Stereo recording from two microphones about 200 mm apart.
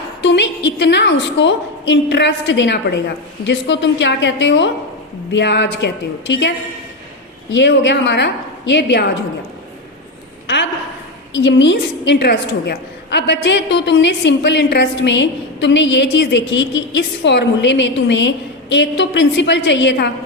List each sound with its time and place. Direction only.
0.2 s a woman's voice: 65° left (ahead or behind)
7.5 s a woman's voice: 60° left (ahead or behind)
10.4 s a sound: 60° left (ahead or behind)
11.3 s a woman's voice: 65° left (ahead or behind)